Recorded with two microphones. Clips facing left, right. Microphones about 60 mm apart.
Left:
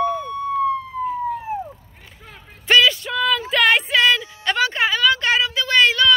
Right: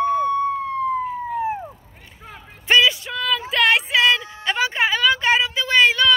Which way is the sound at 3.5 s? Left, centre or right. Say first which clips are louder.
Even; centre.